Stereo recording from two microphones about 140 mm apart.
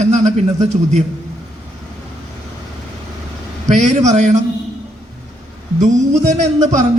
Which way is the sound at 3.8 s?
55° right (ahead or behind).